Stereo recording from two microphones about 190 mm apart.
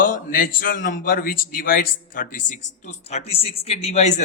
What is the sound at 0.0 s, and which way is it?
A man's voice, 45° left (ahead or behind).